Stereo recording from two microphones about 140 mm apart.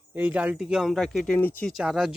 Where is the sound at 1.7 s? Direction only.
5° right (ahead or behind).